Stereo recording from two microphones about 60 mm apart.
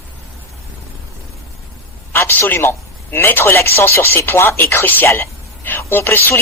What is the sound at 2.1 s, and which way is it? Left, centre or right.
A man's voice, left.